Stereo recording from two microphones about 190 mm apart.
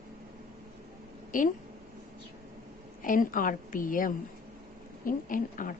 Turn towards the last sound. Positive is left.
turn(degrees=45)  # may be behind; listen again after turning